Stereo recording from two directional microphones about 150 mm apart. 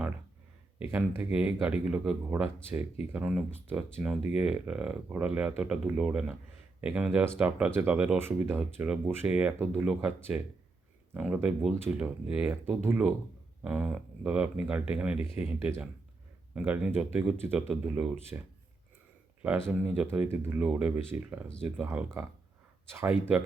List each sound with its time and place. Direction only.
0.8 s speech: 15° right (ahead or behind)
19.4 s speech: 10° right (ahead or behind)